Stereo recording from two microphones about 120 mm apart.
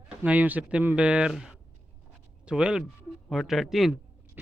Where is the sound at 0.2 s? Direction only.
10° right (ahead or behind).